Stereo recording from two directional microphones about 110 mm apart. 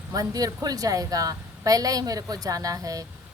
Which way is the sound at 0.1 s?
35° right (ahead or behind).